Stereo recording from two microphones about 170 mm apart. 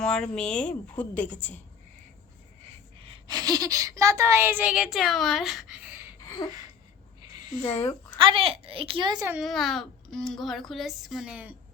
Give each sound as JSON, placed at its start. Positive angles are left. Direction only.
{"t": 0.0, "sound": "a woman's voice", "side_deg": 5}
{"t": 3.0, "sound": "speech", "side_deg": -30}
{"t": 6.2, "sound": "a sound", "side_deg": 25}
{"t": 7.6, "sound": "a woman's voice", "side_deg": 35}
{"t": 8.2, "sound": "a woman's voice", "side_deg": -30}
{"t": 9.4, "sound": "speech", "side_deg": 0}